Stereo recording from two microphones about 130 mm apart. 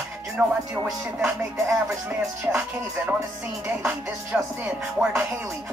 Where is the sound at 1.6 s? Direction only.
5° right (ahead or behind).